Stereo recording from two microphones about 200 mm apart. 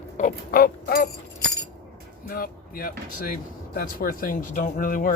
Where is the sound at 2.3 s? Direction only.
45° left (ahead or behind).